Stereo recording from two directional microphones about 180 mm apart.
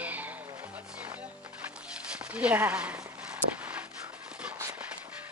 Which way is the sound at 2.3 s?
10° right (ahead or behind).